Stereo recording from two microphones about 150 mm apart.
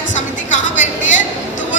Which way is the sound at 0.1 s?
55° left (ahead or behind).